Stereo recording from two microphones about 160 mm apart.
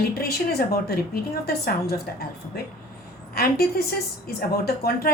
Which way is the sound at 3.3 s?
75° left (ahead or behind).